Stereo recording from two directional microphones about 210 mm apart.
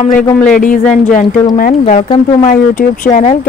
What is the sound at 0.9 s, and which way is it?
Speech, 40° left (ahead or behind).